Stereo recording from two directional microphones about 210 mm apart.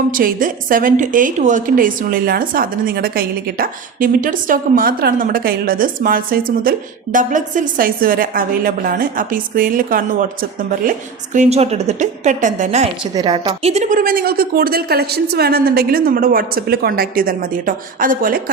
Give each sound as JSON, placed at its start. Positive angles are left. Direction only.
{"t": 0.1, "sound": "a woman's voice", "side_deg": -40}
{"t": 11.3, "sound": "a woman's voice", "side_deg": -30}
{"t": 13.1, "sound": "a woman's voice", "side_deg": -20}